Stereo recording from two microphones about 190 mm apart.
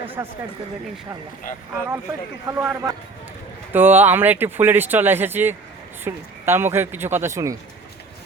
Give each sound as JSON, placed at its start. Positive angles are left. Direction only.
{"t": 0.2, "sound": "speech", "side_deg": -15}
{"t": 1.5, "sound": "speech", "side_deg": 45}
{"t": 2.5, "sound": "speech", "side_deg": -10}